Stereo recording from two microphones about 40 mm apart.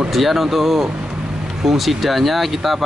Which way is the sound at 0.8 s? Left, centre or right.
Right.